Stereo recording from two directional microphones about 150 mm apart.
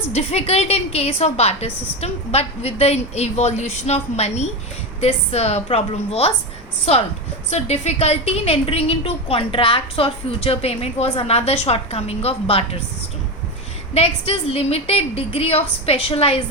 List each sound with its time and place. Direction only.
0.1 s a woman's voice: 45° left (ahead or behind)
7.5 s a woman's voice: 45° left (ahead or behind)
13.9 s a woman's voice: 40° left (ahead or behind)